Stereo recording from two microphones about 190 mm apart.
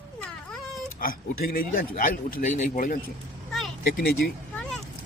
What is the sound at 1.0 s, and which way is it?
Speech, 50° left (ahead or behind).